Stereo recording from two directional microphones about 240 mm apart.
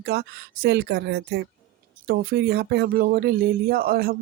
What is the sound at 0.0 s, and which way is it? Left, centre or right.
Speech, right.